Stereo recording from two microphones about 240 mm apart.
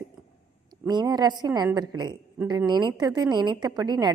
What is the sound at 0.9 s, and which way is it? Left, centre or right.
A woman's voice, centre.